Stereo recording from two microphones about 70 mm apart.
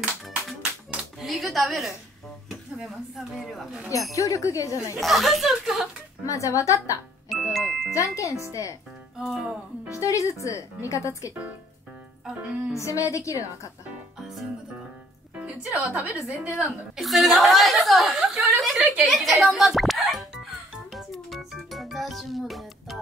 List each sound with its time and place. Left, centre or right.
1.2 s a sound: centre
3.3 s speech: centre
4.1 s speech: left
5.0 s speech: centre
6.2 s speech: left
7.3 s music: centre
7.9 s speech: left
9.2 s speech: centre
9.8 s speech: left
12.3 s speech: centre
12.7 s speech: left
15.9 s a woman's voice: centre
16.3 s speech: centre
19.0 s music: centre